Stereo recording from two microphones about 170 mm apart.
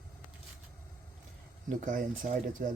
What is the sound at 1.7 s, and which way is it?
Speech, 50° right (ahead or behind).